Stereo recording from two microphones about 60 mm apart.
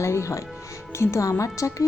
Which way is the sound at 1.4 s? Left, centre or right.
Left.